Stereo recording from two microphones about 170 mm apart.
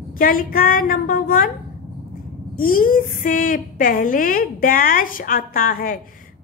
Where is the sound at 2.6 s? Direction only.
55° left (ahead or behind).